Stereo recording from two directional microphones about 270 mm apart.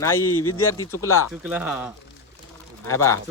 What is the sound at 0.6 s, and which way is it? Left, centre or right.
Speech, centre.